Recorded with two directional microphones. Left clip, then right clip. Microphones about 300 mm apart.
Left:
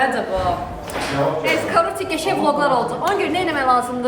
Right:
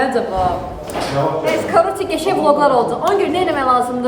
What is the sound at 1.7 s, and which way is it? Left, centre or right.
A woman's voice, centre.